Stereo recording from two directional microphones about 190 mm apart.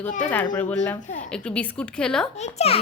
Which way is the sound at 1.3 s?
5° left (ahead or behind).